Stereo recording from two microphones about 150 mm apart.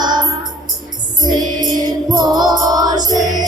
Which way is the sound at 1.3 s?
30° right (ahead or behind).